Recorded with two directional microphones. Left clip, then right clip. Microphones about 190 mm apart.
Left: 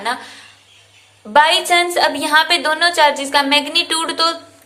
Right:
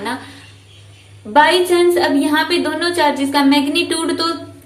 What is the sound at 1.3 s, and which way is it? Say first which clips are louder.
A woman's voice: even; 40° left (ahead or behind).